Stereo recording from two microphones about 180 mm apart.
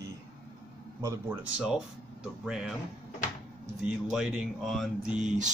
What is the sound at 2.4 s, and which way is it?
Speech, 5° right (ahead or behind).